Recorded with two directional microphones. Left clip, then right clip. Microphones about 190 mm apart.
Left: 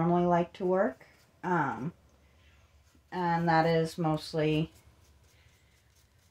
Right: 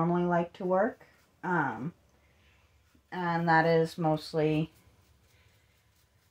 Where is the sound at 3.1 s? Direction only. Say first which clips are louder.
Right 1 dB; 15° right (ahead or behind).